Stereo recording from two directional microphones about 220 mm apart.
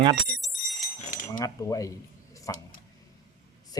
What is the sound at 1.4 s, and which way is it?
Speech, 15° left (ahead or behind).